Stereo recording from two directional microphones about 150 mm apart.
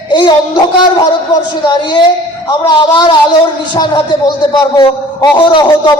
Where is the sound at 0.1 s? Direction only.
30° left (ahead or behind).